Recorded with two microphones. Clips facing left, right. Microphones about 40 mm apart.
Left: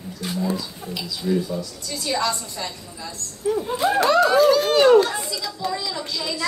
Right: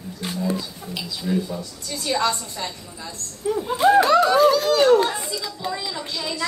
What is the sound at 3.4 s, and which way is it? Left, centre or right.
Speech, centre.